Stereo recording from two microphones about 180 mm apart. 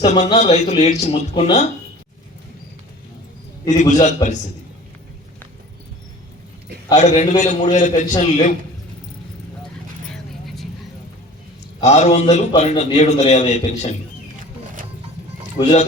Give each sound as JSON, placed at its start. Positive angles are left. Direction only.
{"t": 0.0, "sound": "a man's voice", "side_deg": 40}
{"t": 3.7, "sound": "a man's voice", "side_deg": 40}
{"t": 6.9, "sound": "a man's voice", "side_deg": 40}
{"t": 10.4, "sound": "vehicle", "side_deg": 0}
{"t": 11.8, "sound": "a man's voice", "side_deg": 40}
{"t": 15.6, "sound": "a man's voice", "side_deg": 40}